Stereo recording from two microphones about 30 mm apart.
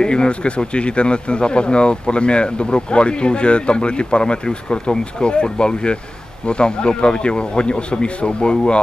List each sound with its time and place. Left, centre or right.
0.0 s speech: left